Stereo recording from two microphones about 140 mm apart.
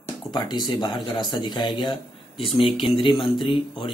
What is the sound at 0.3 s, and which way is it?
Speech, 30° left (ahead or behind).